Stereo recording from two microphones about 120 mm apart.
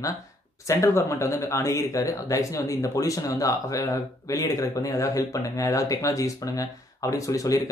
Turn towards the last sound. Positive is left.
turn(degrees=30)  # may be behind; listen again after turning